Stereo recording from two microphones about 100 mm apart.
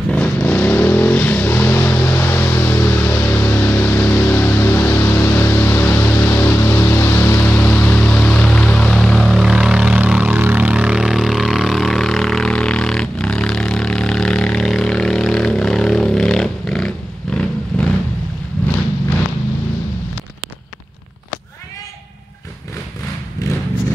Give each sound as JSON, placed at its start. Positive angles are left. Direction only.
{"t": 0.1, "sound": "vehicle", "side_deg": 15}